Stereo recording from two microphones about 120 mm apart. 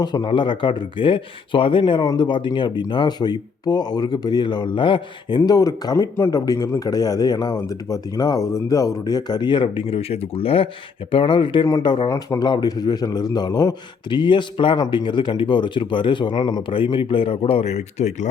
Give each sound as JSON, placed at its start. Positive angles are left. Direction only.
{"t": 0.0, "sound": "speech", "side_deg": 40}
{"t": 5.4, "sound": "speech", "side_deg": 30}
{"t": 12.0, "sound": "speech", "side_deg": 25}
{"t": 12.4, "sound": "speech", "side_deg": 35}
{"t": 14.1, "sound": "speech", "side_deg": 40}
{"t": 16.7, "sound": "speech", "side_deg": 45}